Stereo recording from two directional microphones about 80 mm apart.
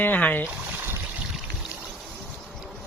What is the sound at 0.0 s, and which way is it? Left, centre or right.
Speech, centre.